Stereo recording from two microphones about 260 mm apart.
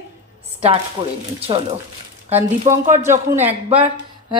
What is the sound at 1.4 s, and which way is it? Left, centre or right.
Speech, right.